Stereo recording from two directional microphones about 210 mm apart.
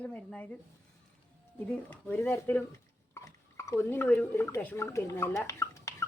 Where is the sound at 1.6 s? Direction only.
10° left (ahead or behind).